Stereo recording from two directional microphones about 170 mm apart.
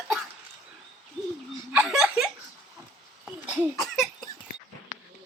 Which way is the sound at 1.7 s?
5° right (ahead or behind).